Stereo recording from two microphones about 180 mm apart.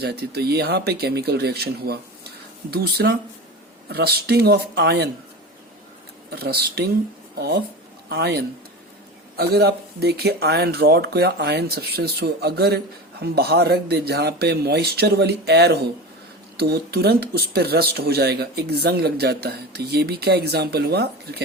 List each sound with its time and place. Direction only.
0.0 s speech: 65° right (ahead or behind)
6.3 s speech: 60° right (ahead or behind)